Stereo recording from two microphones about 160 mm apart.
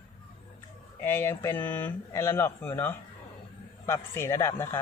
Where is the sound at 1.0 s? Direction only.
15° left (ahead or behind).